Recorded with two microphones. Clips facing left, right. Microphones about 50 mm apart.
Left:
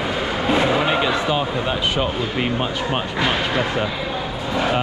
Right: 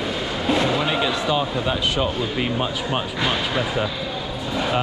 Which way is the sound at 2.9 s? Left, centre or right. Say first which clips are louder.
Left 3 dB; centre.